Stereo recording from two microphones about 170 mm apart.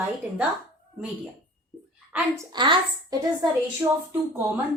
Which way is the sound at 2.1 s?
15° right (ahead or behind).